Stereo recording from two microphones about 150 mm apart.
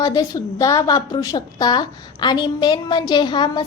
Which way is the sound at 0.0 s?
25° left (ahead or behind).